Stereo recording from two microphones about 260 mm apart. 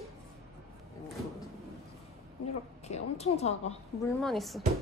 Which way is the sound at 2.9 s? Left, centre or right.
Left.